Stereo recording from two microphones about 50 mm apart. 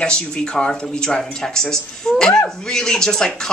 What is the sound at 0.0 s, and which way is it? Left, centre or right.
Speech, centre.